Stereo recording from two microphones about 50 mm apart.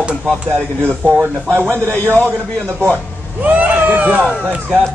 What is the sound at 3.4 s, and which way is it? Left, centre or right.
Speech, right.